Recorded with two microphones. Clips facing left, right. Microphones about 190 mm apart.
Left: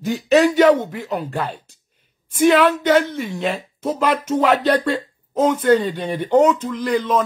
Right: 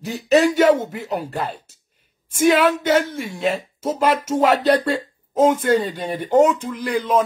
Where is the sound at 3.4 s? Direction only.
45° right (ahead or behind).